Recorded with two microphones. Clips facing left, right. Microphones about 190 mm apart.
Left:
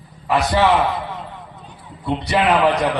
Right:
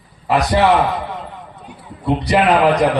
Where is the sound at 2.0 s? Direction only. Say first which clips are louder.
Right 3 dB; 35° right (ahead or behind).